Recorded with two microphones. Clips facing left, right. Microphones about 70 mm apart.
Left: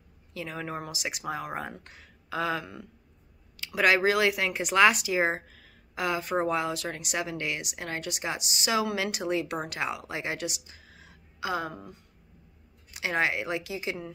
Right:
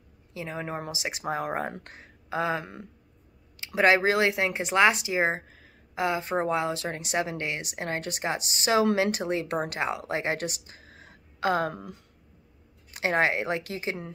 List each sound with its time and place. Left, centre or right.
0.3 s speech: right
2.2 s speech: right
12.9 s speech: right